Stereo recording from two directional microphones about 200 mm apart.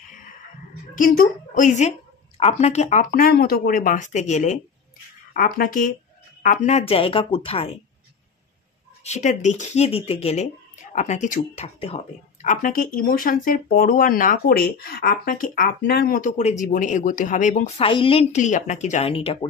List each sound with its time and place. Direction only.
0.9 s a woman's voice: 45° left (ahead or behind); by 7.7 s 30° left (ahead or behind)
9.0 s speech: 35° left (ahead or behind)